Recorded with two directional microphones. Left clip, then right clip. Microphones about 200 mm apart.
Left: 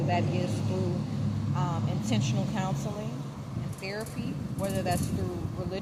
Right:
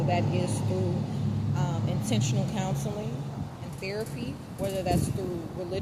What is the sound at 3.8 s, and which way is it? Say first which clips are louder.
Speech: right 3 dB; centre (ahead or behind).